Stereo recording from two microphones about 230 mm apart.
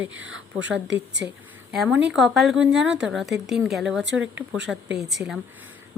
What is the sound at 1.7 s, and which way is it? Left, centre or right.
Speech, centre.